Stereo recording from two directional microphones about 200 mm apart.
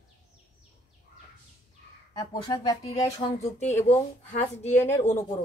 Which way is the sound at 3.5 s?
35° left (ahead or behind).